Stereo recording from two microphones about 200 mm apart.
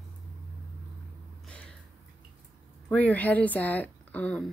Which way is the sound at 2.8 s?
5° left (ahead or behind).